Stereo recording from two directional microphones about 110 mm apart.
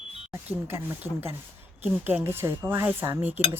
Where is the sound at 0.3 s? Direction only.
20° right (ahead or behind).